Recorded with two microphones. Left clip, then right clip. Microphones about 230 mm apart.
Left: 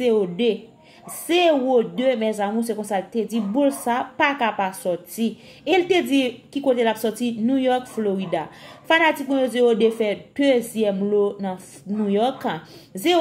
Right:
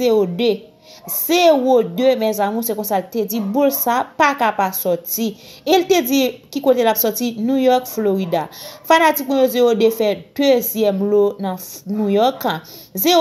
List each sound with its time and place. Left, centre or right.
0.0 s a woman's voice: centre